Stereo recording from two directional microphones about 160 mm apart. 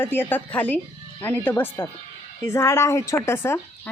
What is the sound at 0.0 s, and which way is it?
A woman's voice, 15° left (ahead or behind).